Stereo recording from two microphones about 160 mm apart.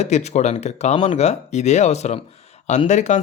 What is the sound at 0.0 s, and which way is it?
A man's voice, 45° left (ahead or behind).